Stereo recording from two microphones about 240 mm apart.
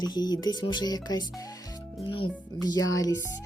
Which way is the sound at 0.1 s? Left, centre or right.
Centre.